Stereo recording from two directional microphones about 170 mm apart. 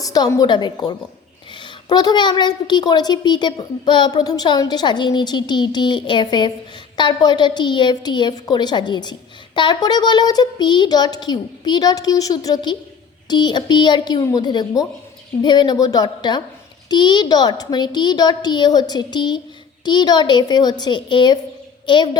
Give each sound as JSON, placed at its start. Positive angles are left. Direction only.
{"t": 0.0, "sound": "a child's voice", "side_deg": 20}